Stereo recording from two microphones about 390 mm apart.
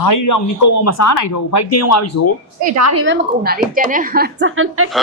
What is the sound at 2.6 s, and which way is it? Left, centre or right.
Speech, right.